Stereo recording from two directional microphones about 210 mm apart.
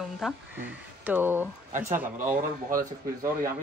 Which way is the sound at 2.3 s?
40° right (ahead or behind).